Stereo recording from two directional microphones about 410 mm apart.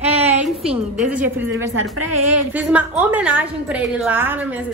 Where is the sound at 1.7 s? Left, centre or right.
Right.